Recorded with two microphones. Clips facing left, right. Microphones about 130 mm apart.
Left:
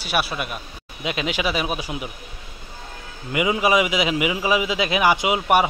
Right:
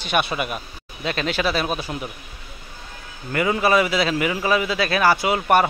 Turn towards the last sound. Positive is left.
turn(degrees=10)  # may be behind; listen again after turning